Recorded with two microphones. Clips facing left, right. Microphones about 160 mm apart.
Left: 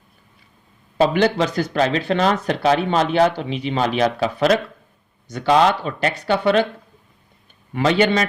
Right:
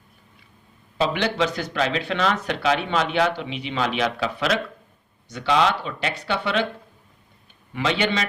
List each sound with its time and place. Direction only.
0.9 s speech: 45° left (ahead or behind)
7.7 s speech: 45° left (ahead or behind)